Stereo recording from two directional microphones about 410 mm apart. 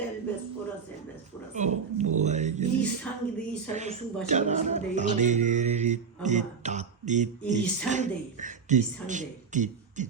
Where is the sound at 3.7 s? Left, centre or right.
Centre.